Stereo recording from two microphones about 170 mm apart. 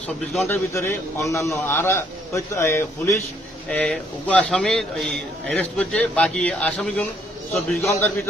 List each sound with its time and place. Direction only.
0.4 s a man's voice: 15° left (ahead or behind)
3.7 s a man's voice: 5° left (ahead or behind)
7.8 s a man's voice: 15° left (ahead or behind)